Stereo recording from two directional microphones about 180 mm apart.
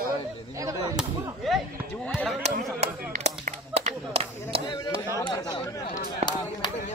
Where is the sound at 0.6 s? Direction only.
20° right (ahead or behind).